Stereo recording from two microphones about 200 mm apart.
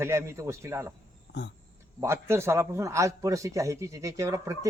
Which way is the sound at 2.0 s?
15° right (ahead or behind).